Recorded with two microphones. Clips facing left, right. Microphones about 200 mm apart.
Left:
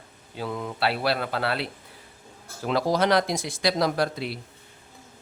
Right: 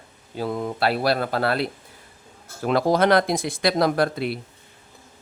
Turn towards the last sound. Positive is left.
turn(degrees=-55)  # may be behind; listen again after turning